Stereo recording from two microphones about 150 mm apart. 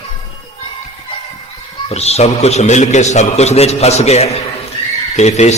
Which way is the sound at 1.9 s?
45° left (ahead or behind).